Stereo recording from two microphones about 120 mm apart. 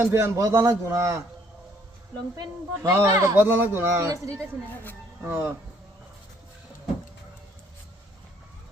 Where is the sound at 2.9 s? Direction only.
25° right (ahead or behind).